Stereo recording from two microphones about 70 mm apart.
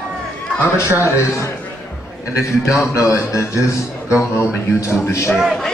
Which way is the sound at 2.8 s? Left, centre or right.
Left.